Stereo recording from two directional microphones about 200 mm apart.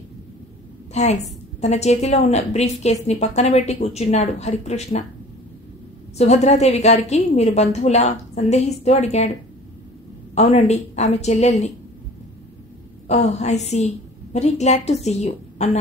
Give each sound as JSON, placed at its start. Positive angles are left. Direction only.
{"t": 0.9, "sound": "a woman's voice", "side_deg": 35}
{"t": 6.1, "sound": "a woman's voice", "side_deg": 35}
{"t": 10.3, "sound": "a woman's voice", "side_deg": 35}
{"t": 13.1, "sound": "a woman's voice", "side_deg": 35}